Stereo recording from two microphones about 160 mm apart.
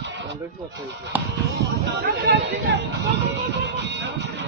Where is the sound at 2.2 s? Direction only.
90° right.